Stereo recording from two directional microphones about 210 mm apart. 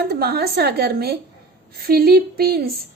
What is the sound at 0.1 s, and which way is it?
A woman's voice, 50° right (ahead or behind).